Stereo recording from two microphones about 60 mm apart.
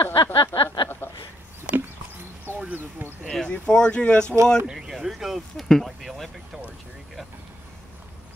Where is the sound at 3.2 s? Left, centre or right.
Centre.